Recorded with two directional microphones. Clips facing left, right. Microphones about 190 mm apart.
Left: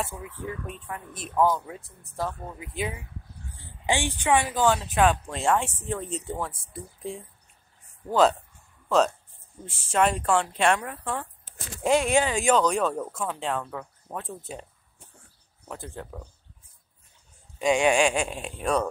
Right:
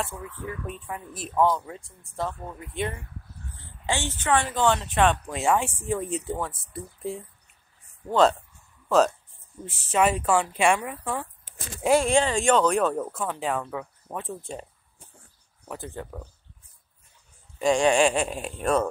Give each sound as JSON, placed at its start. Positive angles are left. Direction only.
{"t": 0.1, "sound": "speech", "side_deg": 20}
{"t": 0.8, "sound": "speech", "side_deg": -5}
{"t": 3.5, "sound": "speech", "side_deg": 15}
{"t": 15.7, "sound": "speech", "side_deg": 0}
{"t": 17.6, "sound": "speech", "side_deg": 0}